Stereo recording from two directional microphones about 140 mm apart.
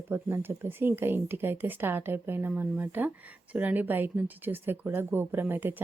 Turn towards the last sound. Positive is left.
turn(degrees=-15)  # may be behind; listen again after turning